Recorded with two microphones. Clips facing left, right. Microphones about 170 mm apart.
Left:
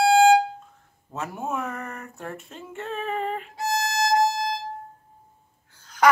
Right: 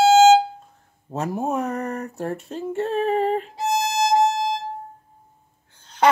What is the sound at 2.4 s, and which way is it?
Female singing, 35° right (ahead or behind).